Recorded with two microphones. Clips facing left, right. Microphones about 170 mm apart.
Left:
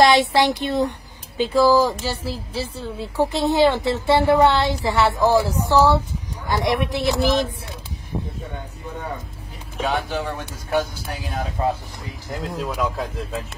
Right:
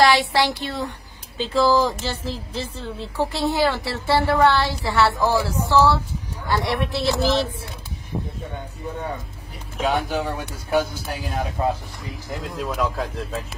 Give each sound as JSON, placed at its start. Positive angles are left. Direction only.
{"t": 0.0, "sound": "a woman's voice", "side_deg": 20}
{"t": 9.8, "sound": "a man's voice", "side_deg": -10}
{"t": 12.3, "sound": "speech", "side_deg": 0}